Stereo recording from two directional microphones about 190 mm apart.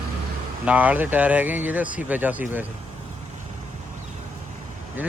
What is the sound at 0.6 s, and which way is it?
Speech, 10° right (ahead or behind).